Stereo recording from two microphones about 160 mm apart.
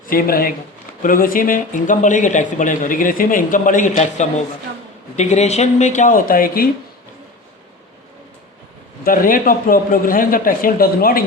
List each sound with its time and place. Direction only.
0.1 s speech: 65° left (ahead or behind)
9.0 s speech: 60° left (ahead or behind)